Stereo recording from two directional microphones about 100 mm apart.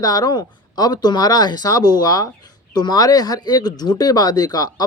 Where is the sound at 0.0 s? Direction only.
40° left (ahead or behind).